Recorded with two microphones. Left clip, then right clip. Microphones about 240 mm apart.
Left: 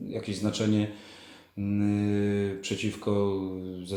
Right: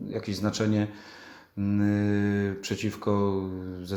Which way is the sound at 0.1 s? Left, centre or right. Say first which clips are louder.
Right 1 dB; centre.